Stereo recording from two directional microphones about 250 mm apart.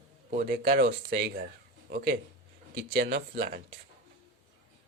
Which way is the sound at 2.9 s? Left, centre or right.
Right.